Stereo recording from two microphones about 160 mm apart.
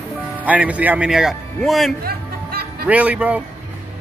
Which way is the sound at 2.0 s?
70° right (ahead or behind).